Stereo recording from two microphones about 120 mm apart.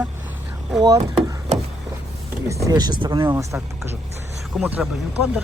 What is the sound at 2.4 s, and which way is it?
Speech, 25° right (ahead or behind).